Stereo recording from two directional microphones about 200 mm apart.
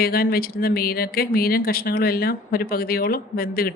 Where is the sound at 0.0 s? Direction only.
50° left (ahead or behind).